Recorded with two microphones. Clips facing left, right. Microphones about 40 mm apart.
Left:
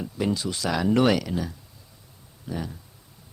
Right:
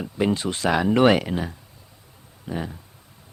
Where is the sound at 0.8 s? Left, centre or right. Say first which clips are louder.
Right 3 dB; right.